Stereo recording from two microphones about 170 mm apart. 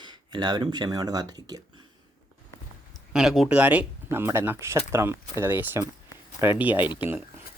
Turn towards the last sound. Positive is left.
turn(degrees=-10)  # may be behind; listen again after turning